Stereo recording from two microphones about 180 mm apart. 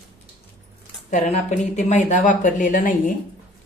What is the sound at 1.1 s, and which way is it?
A woman's voice, 40° left (ahead or behind).